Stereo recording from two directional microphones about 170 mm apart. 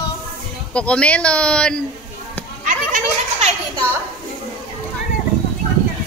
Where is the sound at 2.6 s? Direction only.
50° right (ahead or behind).